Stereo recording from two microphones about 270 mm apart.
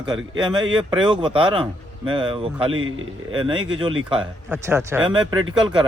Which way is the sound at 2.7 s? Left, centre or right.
Right.